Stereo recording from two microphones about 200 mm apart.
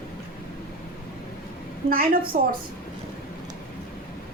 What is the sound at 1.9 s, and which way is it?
Speech, 45° right (ahead or behind).